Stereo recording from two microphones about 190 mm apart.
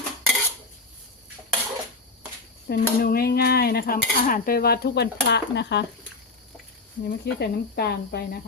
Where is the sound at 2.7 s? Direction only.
50° left (ahead or behind).